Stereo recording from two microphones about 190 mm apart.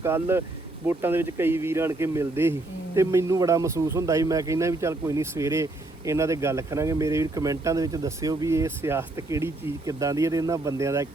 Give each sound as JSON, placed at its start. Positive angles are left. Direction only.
{"t": 0.0, "sound": "speech", "side_deg": -15}